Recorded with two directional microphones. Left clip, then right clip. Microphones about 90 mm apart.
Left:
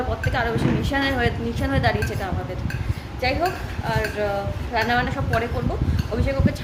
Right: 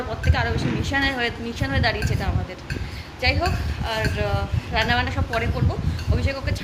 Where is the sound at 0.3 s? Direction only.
10° left (ahead or behind).